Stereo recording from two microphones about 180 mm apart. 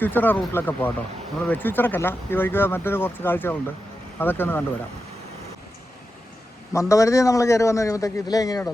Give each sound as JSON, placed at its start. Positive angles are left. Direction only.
{"t": 0.0, "sound": "speech", "side_deg": 10}
{"t": 6.7, "sound": "speech", "side_deg": 15}